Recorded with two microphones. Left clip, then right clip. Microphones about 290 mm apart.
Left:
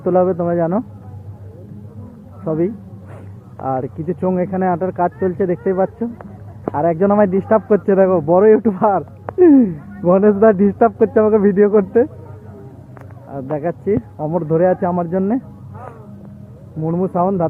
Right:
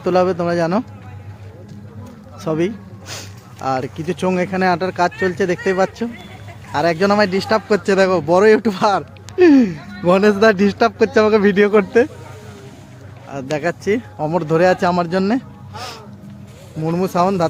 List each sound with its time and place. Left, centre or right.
0.0 s speech: centre
2.4 s a sound: centre
3.6 s speech: centre
13.3 s speech: centre
16.8 s speech: centre